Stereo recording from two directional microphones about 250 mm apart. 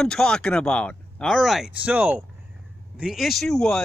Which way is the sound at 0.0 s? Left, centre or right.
Centre.